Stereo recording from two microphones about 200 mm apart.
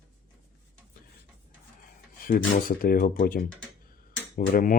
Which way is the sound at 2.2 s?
45° left (ahead or behind).